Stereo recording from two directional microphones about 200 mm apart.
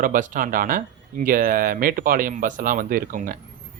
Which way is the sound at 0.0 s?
40° right (ahead or behind).